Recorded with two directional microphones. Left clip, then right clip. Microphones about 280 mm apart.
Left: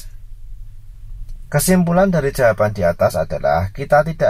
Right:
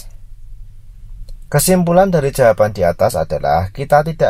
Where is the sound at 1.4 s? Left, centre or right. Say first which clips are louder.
Right 3 dB; right.